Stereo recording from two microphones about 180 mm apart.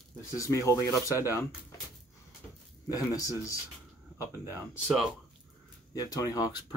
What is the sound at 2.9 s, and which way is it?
Speech, 20° left (ahead or behind).